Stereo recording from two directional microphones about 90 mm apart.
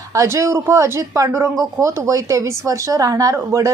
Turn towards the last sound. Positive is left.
turn(degrees=-35)  # may be behind; listen again after turning